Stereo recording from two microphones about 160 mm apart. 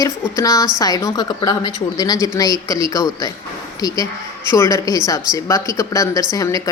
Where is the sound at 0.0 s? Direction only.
20° left (ahead or behind).